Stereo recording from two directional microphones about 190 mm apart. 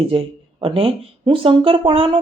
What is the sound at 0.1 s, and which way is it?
Speech, 30° right (ahead or behind).